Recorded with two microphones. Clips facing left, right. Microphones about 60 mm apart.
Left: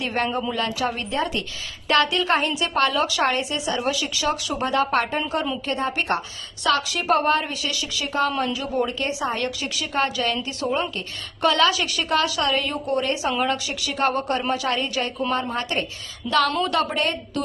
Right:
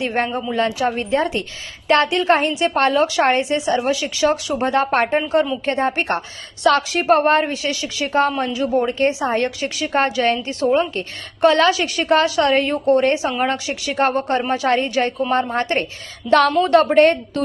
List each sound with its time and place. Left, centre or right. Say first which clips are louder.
0.0 s speech: right 4 dB; right
0.3 s speech: right 1 dB; centre
0.5 s a woman's voice: right 6 dB; right
16.2 s speech: right 7 dB; centre
16.6 s a woman's voice: right 10 dB; right